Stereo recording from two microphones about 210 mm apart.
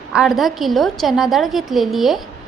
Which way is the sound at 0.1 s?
Centre (ahead or behind).